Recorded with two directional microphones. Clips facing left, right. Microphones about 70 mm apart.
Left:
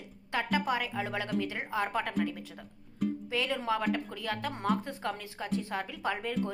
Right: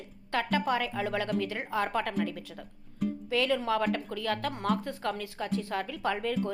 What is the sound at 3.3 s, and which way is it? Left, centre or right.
A woman's voice, left.